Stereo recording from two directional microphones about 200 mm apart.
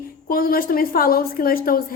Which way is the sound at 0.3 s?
45° left (ahead or behind).